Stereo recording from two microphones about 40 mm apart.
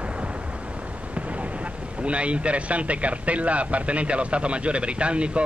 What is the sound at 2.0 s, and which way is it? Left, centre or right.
Speech, right.